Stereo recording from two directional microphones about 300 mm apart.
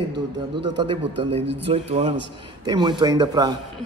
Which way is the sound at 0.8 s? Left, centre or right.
Centre.